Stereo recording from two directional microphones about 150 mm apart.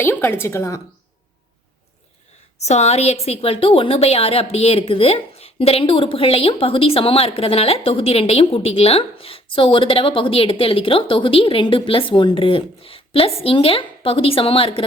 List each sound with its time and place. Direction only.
0.0 s a woman's voice: 15° left (ahead or behind)
2.6 s a woman's voice: 45° left (ahead or behind)